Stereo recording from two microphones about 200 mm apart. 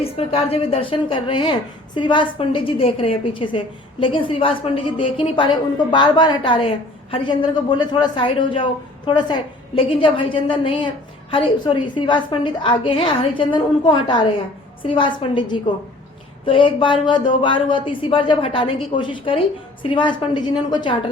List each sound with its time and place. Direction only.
0.0 s a woman's voice: 30° left (ahead or behind)